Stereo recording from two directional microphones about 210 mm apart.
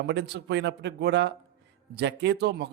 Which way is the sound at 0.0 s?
55° right (ahead or behind).